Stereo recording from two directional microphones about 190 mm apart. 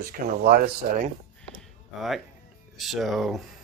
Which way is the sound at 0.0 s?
55° right (ahead or behind).